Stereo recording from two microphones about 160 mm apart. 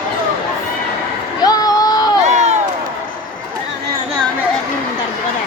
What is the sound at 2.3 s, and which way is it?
Crowd, 45° right (ahead or behind).